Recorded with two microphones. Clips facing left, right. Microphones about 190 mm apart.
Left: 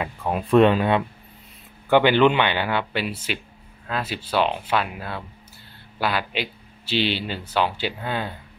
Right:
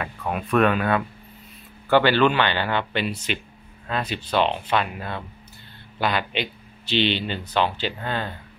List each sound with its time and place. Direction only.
0.0 s speech: 25° left (ahead or behind); by 8.4 s 10° left (ahead or behind)